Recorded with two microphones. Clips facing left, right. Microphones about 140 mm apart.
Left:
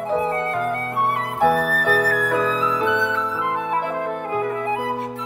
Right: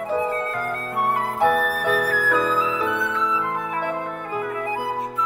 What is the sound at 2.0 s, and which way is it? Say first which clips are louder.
Music: left 1 dB; 70° left (ahead or behind).